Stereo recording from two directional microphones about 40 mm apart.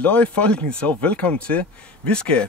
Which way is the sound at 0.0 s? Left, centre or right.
Left.